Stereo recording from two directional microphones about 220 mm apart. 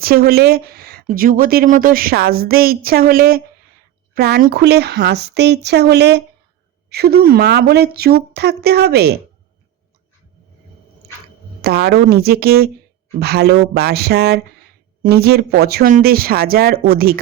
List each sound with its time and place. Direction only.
0.0 s speech: 45° right (ahead or behind)
11.6 s speech: 45° right (ahead or behind)